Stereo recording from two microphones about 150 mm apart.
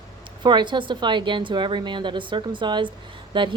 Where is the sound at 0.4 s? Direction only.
30° right (ahead or behind).